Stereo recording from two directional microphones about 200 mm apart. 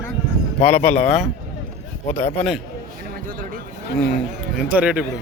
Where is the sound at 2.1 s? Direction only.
35° left (ahead or behind).